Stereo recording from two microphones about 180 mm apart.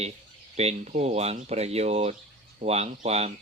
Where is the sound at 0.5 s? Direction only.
35° right (ahead or behind).